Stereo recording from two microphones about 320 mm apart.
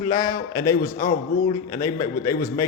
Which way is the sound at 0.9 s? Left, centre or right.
Left.